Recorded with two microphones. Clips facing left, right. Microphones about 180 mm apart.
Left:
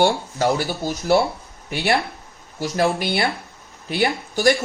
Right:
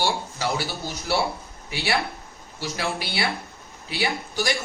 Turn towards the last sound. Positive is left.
turn(degrees=50)  # may be behind; listen again after turning